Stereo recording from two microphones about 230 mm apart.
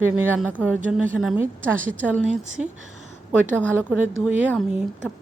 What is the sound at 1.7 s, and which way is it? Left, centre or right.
Speech, right.